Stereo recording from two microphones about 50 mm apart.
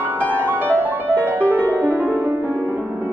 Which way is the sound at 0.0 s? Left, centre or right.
Right.